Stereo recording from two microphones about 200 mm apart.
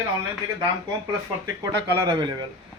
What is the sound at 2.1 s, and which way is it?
Speech, 25° right (ahead or behind).